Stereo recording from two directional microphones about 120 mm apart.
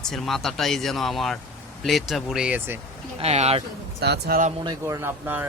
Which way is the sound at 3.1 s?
60° right (ahead or behind).